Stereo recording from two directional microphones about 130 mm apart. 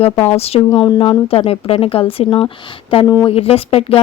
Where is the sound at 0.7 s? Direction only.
35° left (ahead or behind).